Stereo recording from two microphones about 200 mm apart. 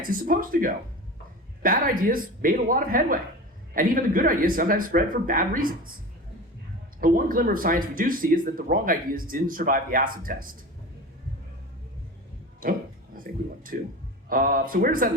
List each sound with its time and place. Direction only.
0.0 s speech: 45° right (ahead or behind)
7.0 s speech: 45° right (ahead or behind)
12.6 s speech: 45° right (ahead or behind)